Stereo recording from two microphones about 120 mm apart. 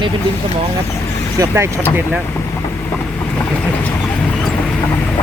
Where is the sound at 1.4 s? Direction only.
25° right (ahead or behind).